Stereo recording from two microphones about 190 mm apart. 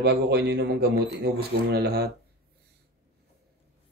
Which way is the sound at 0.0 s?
60° right (ahead or behind).